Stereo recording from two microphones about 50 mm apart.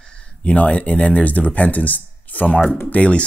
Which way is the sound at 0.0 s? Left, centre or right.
Left.